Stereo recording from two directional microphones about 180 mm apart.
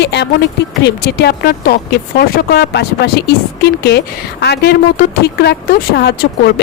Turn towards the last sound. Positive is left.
turn(degrees=65)  # may be behind; listen again after turning